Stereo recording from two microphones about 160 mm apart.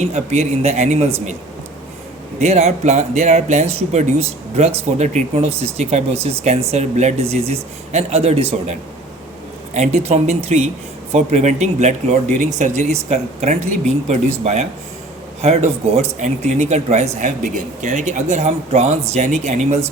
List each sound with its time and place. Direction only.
0.0 s speech: 45° right (ahead or behind)
2.4 s speech: 45° right (ahead or behind)
9.7 s speech: 45° right (ahead or behind)